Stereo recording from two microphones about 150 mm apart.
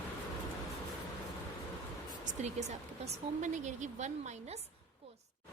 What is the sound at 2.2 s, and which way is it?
Speech, 50° right (ahead or behind).